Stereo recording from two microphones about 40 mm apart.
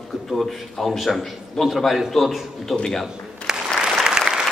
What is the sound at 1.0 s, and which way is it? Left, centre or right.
A man's voice, centre.